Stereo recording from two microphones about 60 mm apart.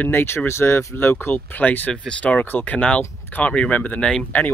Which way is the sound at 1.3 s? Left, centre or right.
Left.